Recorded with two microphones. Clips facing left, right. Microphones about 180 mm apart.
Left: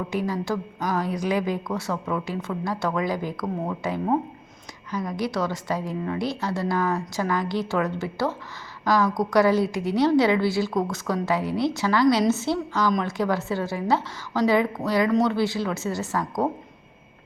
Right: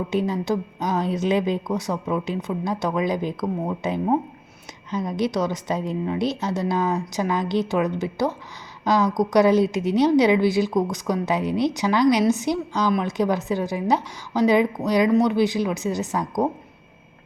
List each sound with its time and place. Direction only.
0.1 s a woman's voice: 20° right (ahead or behind)